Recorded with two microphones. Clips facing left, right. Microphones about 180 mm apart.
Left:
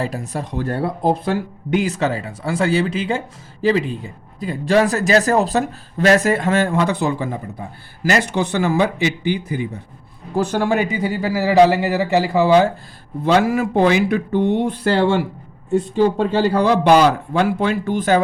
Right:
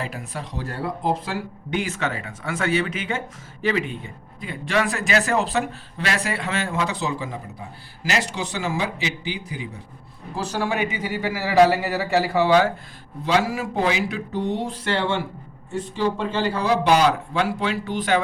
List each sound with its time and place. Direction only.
0.0 s speech: 40° left (ahead or behind)
0.5 s speech: 55° left (ahead or behind)
1.3 s speech: 40° left (ahead or behind)
11.5 s speech: 25° left (ahead or behind)
13.2 s speech: 55° left (ahead or behind)
16.0 s a man's voice: 45° left (ahead or behind)